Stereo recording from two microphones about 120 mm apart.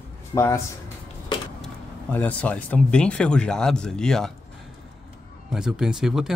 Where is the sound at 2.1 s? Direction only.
10° left (ahead or behind).